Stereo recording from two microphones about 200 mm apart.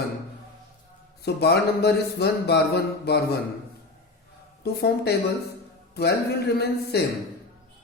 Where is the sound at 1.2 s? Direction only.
55° left (ahead or behind).